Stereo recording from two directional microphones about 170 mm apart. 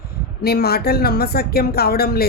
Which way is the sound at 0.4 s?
65° left (ahead or behind).